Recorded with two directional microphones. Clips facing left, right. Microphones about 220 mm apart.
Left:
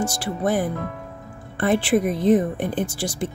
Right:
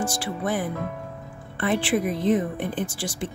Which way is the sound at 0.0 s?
40° left (ahead or behind).